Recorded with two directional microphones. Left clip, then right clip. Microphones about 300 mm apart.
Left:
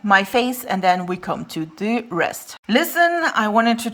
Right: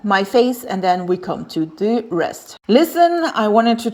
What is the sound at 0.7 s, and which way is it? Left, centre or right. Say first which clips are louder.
Speech: right 1 dB; left.